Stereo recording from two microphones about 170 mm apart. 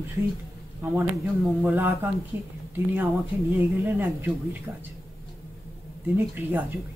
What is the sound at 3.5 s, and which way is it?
Speech, 15° right (ahead or behind).